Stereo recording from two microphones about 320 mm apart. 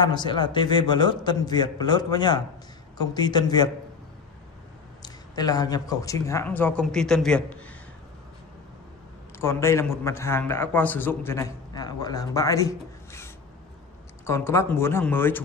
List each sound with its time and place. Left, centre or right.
0.0 s a man's voice: centre
5.0 s speech: centre
9.4 s a man's voice: centre